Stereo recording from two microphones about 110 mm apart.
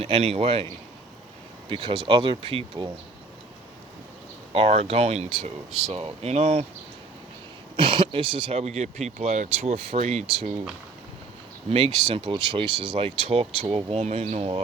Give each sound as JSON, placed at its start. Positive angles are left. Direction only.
{"t": 0.0, "sound": "speech", "side_deg": -65}
{"t": 1.7, "sound": "speech", "side_deg": -50}
{"t": 4.5, "sound": "speech", "side_deg": -65}
{"t": 7.8, "sound": "speech", "side_deg": -50}
{"t": 11.7, "sound": "speech", "side_deg": -55}
{"t": 13.1, "sound": "speech", "side_deg": -65}